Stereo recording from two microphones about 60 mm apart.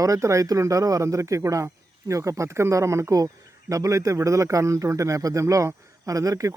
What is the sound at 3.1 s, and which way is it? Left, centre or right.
Speech, right.